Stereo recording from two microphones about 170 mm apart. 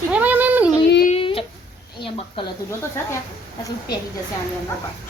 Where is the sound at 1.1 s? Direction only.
35° left (ahead or behind).